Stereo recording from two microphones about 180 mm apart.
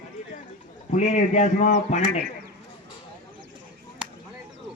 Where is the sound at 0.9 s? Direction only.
40° left (ahead or behind).